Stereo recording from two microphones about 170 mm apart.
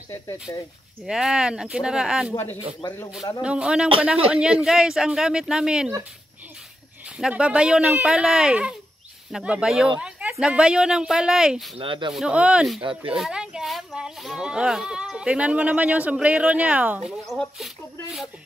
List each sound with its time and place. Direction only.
1.0 s speech: 5° right (ahead or behind)
3.4 s speech: 5° right (ahead or behind)
7.2 s speech: 5° right (ahead or behind)
11.8 s speech: 30° right (ahead or behind)
12.1 s speech: 5° right (ahead or behind)